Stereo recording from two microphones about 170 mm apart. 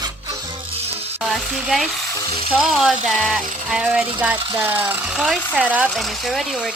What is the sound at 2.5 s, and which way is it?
Speech, 5° right (ahead or behind).